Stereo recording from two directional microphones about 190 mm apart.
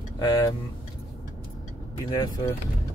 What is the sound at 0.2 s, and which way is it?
Speech, 20° left (ahead or behind).